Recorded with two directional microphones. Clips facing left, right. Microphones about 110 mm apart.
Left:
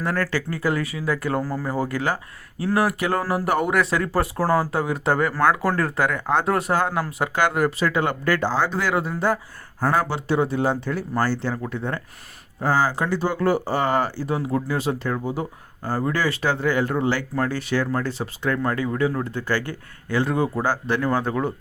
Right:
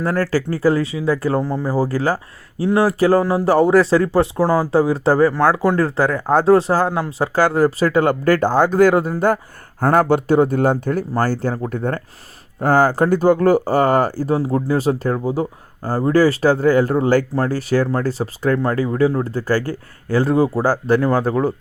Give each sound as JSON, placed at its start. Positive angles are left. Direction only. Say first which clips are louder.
{"t": 0.0, "sound": "speech", "louder": "right 6 dB", "side_deg": -35}
{"t": 4.7, "sound": "speech", "louder": "right 7 dB", "side_deg": -30}